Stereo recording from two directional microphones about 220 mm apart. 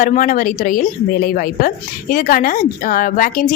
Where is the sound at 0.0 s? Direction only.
35° left (ahead or behind).